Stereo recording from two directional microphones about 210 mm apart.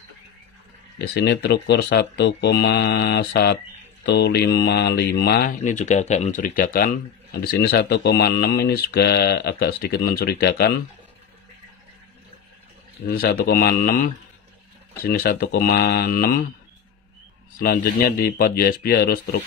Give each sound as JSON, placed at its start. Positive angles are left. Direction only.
{"t": 0.9, "sound": "speech", "side_deg": 50}
{"t": 13.0, "sound": "speech", "side_deg": 45}
{"t": 17.6, "sound": "speech", "side_deg": 45}